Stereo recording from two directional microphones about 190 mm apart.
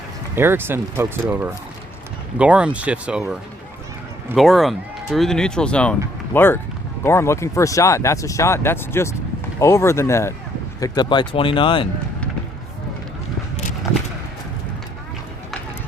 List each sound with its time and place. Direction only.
0.3 s speech: 10° right (ahead or behind)
4.4 s speech: centre (ahead or behind); by 11.9 s 25° left (ahead or behind)